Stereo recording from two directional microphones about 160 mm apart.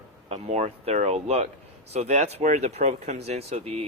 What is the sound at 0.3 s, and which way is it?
Speech, 45° right (ahead or behind).